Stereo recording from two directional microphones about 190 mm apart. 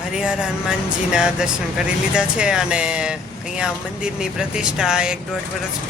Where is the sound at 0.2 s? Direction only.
5° right (ahead or behind).